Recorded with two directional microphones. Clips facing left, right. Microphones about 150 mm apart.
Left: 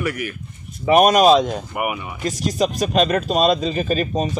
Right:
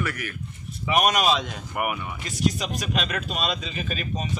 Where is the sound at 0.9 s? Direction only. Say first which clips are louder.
Left 9 dB; 40° left (ahead or behind).